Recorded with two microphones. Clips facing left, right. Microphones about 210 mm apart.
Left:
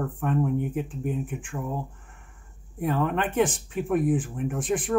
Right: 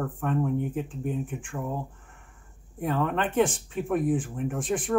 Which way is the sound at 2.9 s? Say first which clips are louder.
Left 1 dB; 15° left (ahead or behind).